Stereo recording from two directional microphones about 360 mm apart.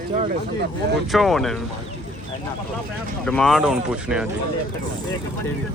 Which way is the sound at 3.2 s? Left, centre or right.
Centre.